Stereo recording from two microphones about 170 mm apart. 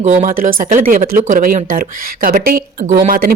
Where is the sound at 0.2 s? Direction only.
50° right (ahead or behind).